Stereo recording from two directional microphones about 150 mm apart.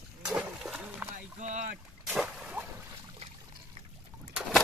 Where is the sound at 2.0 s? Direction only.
5° right (ahead or behind).